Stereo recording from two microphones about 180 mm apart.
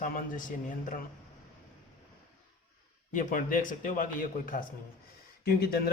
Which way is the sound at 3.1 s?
45° left (ahead or behind).